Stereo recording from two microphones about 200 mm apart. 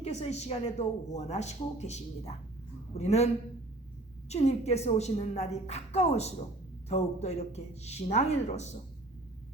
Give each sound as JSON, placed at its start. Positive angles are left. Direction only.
{"t": 0.0, "sound": "speech", "side_deg": 35}
{"t": 4.3, "sound": "speech", "side_deg": 35}